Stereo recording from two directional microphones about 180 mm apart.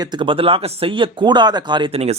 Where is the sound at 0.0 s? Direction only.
25° right (ahead or behind).